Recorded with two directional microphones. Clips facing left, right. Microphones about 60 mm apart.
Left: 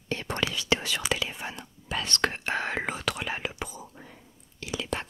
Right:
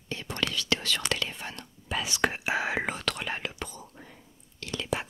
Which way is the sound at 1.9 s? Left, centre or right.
Centre.